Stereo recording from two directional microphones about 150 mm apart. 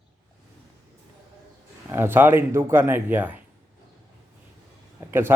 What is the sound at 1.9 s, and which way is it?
A man's voice, 15° right (ahead or behind).